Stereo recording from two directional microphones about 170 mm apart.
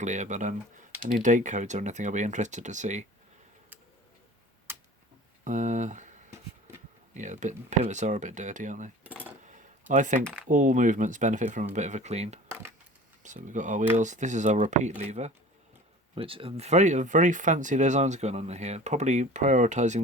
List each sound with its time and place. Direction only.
0.0 s speech: 45° right (ahead or behind)
4.7 s a sound: 15° right (ahead or behind)
5.5 s speech: 45° right (ahead or behind)
7.1 s speech: 45° right (ahead or behind)
9.4 s coin: 45° right (ahead or behind)
9.9 s speech: 45° right (ahead or behind)